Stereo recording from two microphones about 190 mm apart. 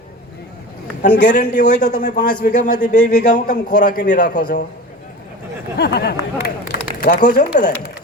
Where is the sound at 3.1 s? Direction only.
45° left (ahead or behind).